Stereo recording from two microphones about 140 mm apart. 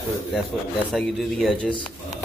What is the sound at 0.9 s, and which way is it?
Speech, centre (ahead or behind).